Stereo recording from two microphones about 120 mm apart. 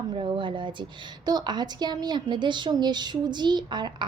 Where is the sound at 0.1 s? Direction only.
40° right (ahead or behind).